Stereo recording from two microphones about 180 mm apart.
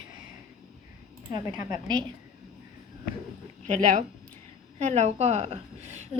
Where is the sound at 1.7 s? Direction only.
20° right (ahead or behind).